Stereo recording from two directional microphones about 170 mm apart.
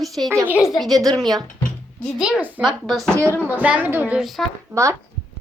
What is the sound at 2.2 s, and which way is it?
A woman's voice, 5° right (ahead or behind).